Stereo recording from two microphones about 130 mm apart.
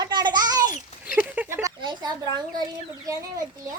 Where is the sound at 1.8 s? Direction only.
35° right (ahead or behind).